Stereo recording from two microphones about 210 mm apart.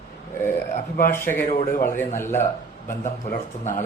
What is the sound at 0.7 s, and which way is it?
Speech, 40° left (ahead or behind).